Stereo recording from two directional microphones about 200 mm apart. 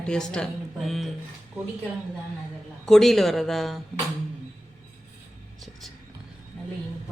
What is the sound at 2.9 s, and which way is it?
Speech, centre (ahead or behind).